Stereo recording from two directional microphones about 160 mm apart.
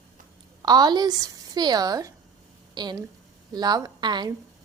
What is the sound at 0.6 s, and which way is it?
A woman's voice, 25° right (ahead or behind).